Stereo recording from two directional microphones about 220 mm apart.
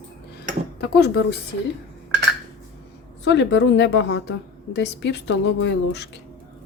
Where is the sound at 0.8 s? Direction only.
50° left (ahead or behind).